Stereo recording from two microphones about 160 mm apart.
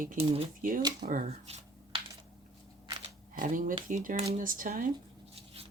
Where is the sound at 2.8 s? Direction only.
30° right (ahead or behind).